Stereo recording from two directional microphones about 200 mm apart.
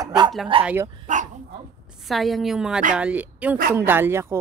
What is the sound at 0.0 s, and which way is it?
Bow-wow, 20° right (ahead or behind).